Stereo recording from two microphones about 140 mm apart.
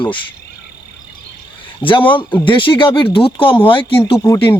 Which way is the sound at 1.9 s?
35° left (ahead or behind).